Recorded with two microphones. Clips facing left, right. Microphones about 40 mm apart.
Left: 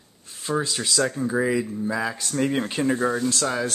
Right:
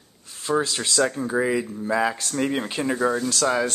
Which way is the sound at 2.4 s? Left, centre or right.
Centre.